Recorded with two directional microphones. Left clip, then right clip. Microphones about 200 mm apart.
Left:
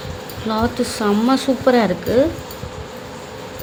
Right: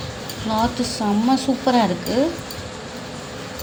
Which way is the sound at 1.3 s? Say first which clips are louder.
Left 3 dB; 30° left (ahead or behind).